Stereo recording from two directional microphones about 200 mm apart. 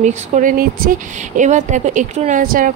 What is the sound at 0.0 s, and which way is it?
Speech, 40° right (ahead or behind).